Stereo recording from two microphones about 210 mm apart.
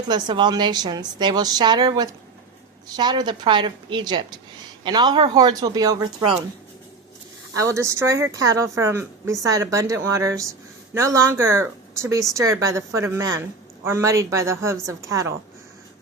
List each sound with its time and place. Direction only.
0.1 s a woman's voice: 20° right (ahead or behind)
7.5 s speech: 15° right (ahead or behind)